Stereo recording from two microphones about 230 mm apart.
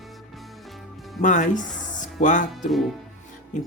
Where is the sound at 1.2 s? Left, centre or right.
Left.